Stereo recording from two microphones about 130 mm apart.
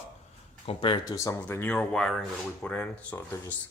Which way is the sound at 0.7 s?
45° left (ahead or behind).